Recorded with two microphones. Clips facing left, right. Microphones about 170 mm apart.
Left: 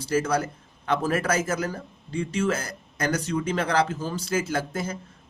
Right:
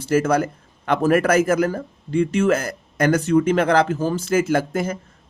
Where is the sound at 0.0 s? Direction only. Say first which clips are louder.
Right 6 dB; 55° right (ahead or behind).